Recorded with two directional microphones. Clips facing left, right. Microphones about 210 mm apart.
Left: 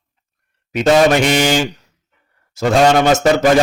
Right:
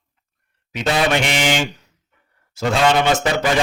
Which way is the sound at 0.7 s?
45° left (ahead or behind).